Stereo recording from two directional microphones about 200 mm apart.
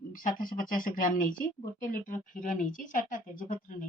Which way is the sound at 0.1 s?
45° left (ahead or behind).